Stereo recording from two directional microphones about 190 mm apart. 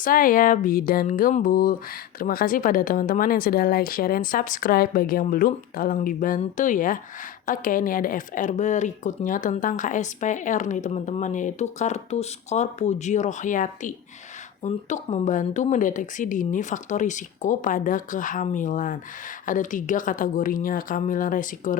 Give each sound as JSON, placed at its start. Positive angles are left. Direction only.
{"t": 0.0, "sound": "speech", "side_deg": 45}